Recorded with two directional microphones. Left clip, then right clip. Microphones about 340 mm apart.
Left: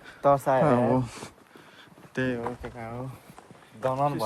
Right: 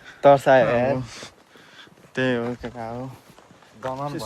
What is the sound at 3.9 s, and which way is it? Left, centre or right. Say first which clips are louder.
Speech: left 4 dB; left.